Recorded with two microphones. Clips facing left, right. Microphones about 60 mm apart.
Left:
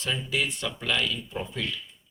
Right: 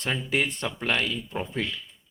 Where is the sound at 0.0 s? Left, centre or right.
Right.